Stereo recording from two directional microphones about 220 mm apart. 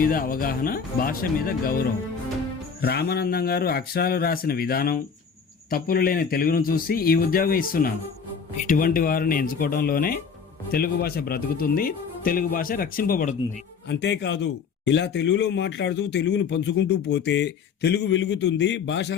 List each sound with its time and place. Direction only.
0.0 s speech: 40° left (ahead or behind)
2.8 s a man's voice: 45° left (ahead or behind)
13.8 s a man's voice: 50° left (ahead or behind)